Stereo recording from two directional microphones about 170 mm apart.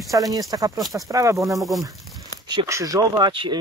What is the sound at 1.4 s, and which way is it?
Speech, centre (ahead or behind).